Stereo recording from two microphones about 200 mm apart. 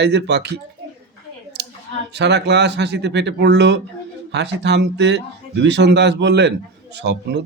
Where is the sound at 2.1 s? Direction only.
60° right (ahead or behind).